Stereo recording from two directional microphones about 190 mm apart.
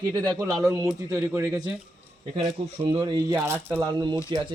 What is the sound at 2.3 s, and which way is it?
Speech, 25° right (ahead or behind).